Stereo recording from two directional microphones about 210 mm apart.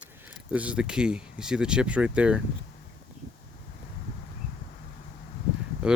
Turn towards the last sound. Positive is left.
turn(degrees=-5)  # may be behind; listen again after turning